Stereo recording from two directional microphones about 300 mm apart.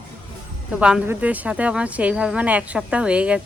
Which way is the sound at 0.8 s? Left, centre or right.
Centre.